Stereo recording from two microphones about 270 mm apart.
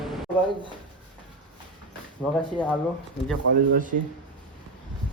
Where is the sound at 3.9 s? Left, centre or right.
Right.